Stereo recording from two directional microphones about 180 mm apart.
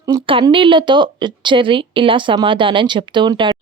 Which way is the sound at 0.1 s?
25° right (ahead or behind).